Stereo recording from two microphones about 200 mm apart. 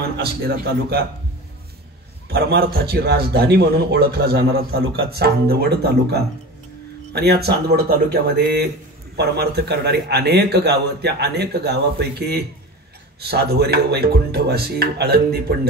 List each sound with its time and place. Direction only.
0.2 s speech: 50° right (ahead or behind)
2.2 s a man's voice: 50° right (ahead or behind)